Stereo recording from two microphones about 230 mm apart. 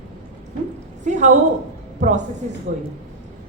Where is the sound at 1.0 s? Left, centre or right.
Right.